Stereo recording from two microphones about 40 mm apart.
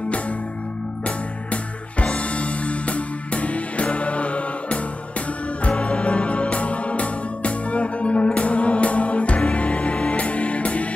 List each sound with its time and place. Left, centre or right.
1.0 s music: left